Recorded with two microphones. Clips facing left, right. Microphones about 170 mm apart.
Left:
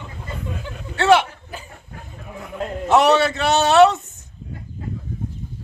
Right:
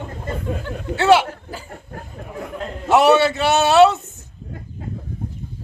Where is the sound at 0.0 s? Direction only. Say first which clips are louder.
Right 5 dB; 50° right (ahead or behind).